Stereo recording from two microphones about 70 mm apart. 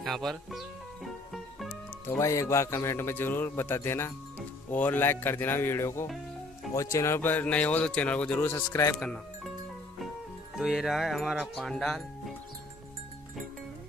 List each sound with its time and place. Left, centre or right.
0.0 s speech: centre
2.0 s a man's voice: left
4.4 s speech: left
7.4 s a man's voice: left
8.5 s a man's voice: left
10.5 s speech: centre